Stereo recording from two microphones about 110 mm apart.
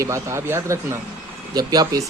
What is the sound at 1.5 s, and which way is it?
Speech, 35° right (ahead or behind).